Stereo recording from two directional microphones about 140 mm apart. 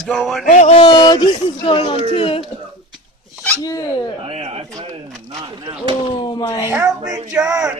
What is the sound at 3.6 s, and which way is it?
Speech, 30° left (ahead or behind).